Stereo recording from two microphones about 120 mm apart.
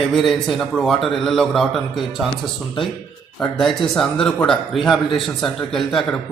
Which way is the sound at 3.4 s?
5° left (ahead or behind).